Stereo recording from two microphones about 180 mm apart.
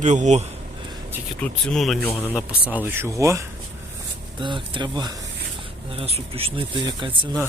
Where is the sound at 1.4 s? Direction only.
5° left (ahead or behind).